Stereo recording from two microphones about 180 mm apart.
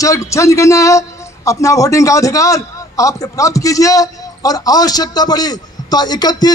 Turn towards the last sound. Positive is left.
turn(degrees=20)  # may be behind; listen again after turning